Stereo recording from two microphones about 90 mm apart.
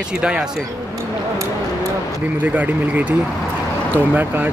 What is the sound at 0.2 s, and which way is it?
Speech, 10° right (ahead or behind).